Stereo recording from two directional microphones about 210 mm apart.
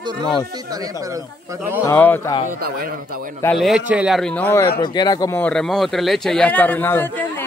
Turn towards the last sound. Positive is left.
turn(degrees=10)  # may be behind; listen again after turning